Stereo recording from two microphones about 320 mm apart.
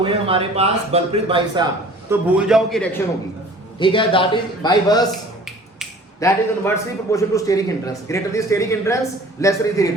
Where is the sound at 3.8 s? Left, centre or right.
Centre.